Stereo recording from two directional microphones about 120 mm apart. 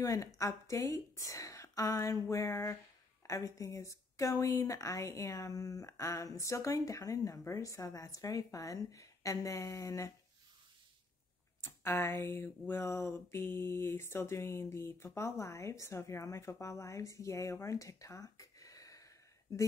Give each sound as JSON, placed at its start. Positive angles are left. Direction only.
{"t": 0.0, "sound": "speech", "side_deg": 30}
{"t": 11.6, "sound": "speech", "side_deg": 20}